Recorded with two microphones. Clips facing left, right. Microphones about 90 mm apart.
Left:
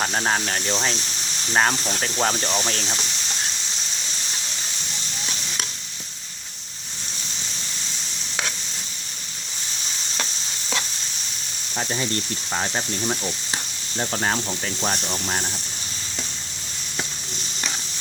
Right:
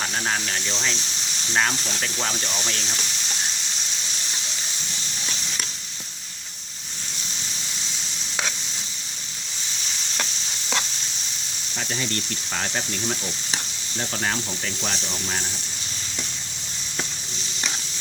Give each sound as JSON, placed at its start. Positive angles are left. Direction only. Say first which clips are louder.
{"t": 0.0, "sound": "speech", "louder": "left 4 dB", "side_deg": 40}
{"t": 11.8, "sound": "speech", "louder": "left 3 dB", "side_deg": 30}
{"t": 14.0, "sound": "speech", "louder": "left 3 dB", "side_deg": 35}